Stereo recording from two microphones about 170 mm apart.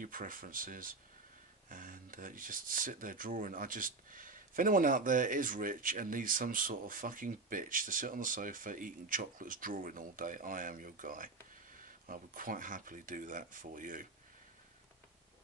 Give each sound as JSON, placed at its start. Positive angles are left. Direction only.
{"t": 0.0, "sound": "speech", "side_deg": -55}